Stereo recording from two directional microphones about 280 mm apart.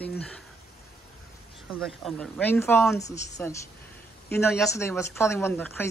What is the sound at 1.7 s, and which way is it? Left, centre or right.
Speech, centre.